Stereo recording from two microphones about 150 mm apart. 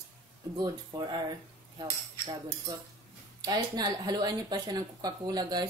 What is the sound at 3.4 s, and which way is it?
Speech, 25° right (ahead or behind).